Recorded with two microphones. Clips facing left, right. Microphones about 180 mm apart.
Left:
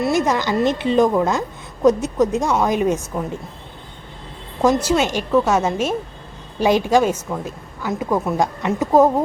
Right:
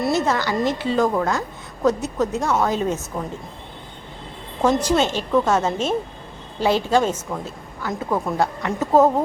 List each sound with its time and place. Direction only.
0.1 s a woman's voice: 10° left (ahead or behind)
4.6 s a woman's voice: 5° left (ahead or behind)